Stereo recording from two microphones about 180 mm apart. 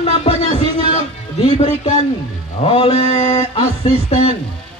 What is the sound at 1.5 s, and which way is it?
Speech, 35° left (ahead or behind).